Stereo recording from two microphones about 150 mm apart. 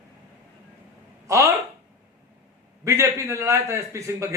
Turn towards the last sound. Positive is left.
turn(degrees=-20)  # may be behind; listen again after turning